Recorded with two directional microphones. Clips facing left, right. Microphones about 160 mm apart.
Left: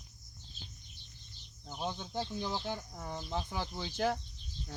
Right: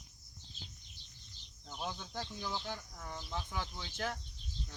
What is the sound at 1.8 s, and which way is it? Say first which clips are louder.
Speech: left 5 dB; 25° left (ahead or behind).